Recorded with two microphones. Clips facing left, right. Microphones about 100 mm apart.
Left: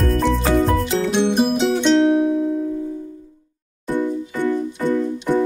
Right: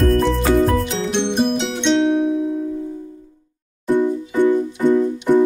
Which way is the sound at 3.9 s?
15° right (ahead or behind).